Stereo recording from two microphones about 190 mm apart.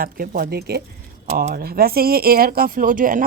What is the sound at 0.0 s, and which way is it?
Speech, 50° right (ahead or behind).